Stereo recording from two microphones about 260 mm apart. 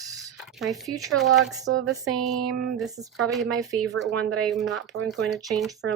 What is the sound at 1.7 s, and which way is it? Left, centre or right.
Speech, right.